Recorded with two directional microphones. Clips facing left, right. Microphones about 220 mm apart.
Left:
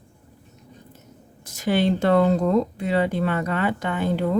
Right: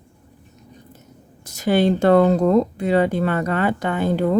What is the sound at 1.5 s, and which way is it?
Speech, 40° right (ahead or behind).